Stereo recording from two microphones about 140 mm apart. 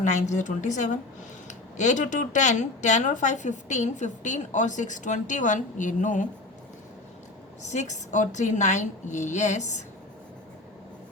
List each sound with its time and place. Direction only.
0.0 s a woman's voice: 60° left (ahead or behind)
7.7 s a woman's voice: 55° left (ahead or behind)